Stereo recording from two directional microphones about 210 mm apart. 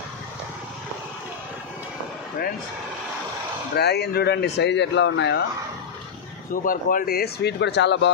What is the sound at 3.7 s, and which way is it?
Speech, 50° left (ahead or behind).